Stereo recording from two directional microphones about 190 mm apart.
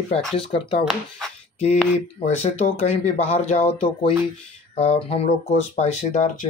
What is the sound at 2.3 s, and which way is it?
Speech, 35° left (ahead or behind).